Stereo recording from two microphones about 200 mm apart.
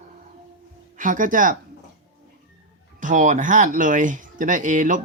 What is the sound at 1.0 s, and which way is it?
Speech, 40° right (ahead or behind).